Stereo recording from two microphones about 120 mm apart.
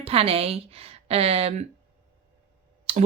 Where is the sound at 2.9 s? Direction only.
60° right (ahead or behind).